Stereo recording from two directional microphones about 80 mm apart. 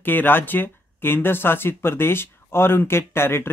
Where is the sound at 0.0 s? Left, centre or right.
Left.